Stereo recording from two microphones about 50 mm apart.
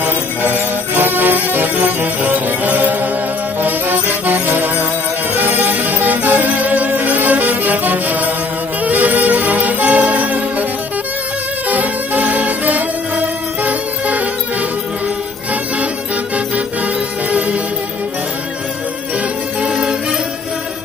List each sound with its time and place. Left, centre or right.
0.9 s music: right
11.7 s music: right
19.6 s music: right